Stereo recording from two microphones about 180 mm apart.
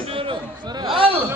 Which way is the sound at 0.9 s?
30° right (ahead or behind).